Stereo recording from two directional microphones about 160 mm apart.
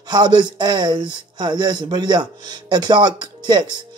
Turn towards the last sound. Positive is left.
turn(degrees=-25)  # may be behind; listen again after turning